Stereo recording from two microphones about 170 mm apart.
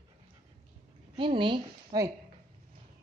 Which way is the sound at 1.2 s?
30° right (ahead or behind).